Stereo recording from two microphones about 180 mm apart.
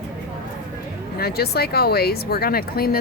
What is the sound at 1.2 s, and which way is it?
Speech, 60° left (ahead or behind).